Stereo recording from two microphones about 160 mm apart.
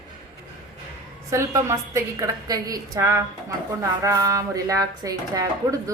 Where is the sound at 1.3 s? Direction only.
20° right (ahead or behind).